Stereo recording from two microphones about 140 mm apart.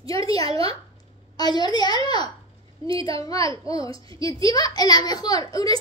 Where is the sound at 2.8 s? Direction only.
40° right (ahead or behind).